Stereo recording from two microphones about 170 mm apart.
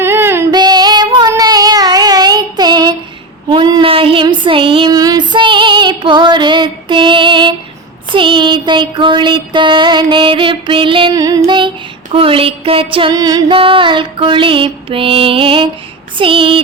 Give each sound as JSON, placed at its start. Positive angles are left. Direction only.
{"t": 0.0, "sound": "female singing", "side_deg": -15}
{"t": 0.5, "sound": "child singing", "side_deg": -25}
{"t": 8.1, "sound": "music", "side_deg": -30}
{"t": 11.1, "sound": "music", "side_deg": -20}
{"t": 12.1, "sound": "a sound", "side_deg": -30}
{"t": 13.6, "sound": "music", "side_deg": -30}